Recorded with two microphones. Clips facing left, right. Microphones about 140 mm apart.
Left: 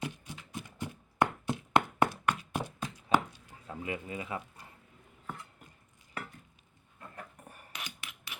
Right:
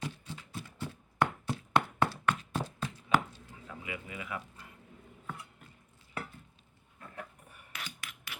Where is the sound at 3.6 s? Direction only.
35° left (ahead or behind).